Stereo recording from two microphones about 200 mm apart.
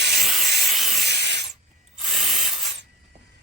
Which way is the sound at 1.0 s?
55° right (ahead or behind).